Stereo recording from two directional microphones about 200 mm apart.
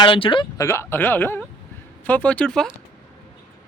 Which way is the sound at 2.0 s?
5° left (ahead or behind).